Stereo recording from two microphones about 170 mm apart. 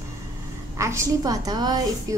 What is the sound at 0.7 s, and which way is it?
A woman's voice, 15° right (ahead or behind).